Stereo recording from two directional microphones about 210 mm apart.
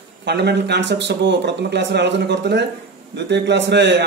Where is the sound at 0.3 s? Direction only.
55° right (ahead or behind).